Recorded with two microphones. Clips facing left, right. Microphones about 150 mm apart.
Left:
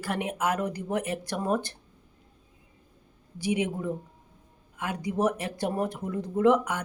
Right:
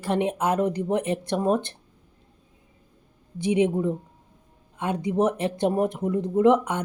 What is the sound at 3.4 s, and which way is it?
Speech, 25° right (ahead or behind).